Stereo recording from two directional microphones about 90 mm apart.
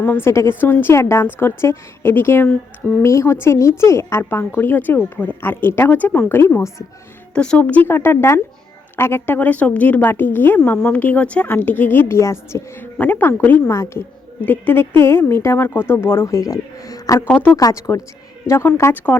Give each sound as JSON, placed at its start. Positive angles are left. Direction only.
{"t": 0.2, "sound": "speech", "side_deg": 30}
{"t": 7.3, "sound": "speech", "side_deg": 10}
{"t": 13.7, "sound": "speech", "side_deg": 30}
{"t": 14.4, "sound": "speech", "side_deg": 20}
{"t": 17.2, "sound": "speech", "side_deg": 15}
{"t": 17.5, "sound": "speech", "side_deg": 35}
{"t": 18.4, "sound": "speech", "side_deg": 30}